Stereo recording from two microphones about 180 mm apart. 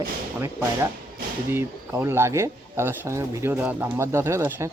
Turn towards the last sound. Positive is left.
turn(degrees=-15)  # may be behind; listen again after turning